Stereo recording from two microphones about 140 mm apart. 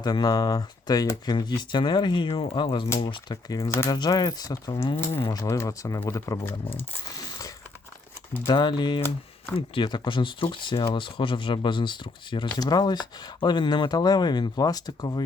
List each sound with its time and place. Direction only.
0.0 s speech: 30° left (ahead or behind)
8.4 s speech: 35° left (ahead or behind)